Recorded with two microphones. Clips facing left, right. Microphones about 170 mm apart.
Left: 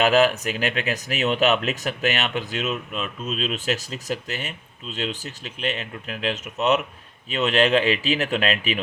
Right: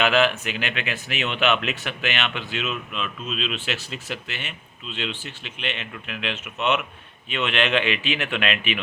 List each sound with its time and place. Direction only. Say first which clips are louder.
0.0 s speech: left 3 dB; 40° left (ahead or behind)